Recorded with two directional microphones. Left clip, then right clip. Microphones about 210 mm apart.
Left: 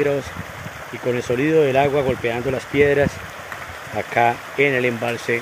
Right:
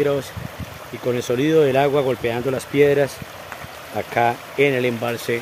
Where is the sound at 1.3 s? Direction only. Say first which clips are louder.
Even; 10° right (ahead or behind).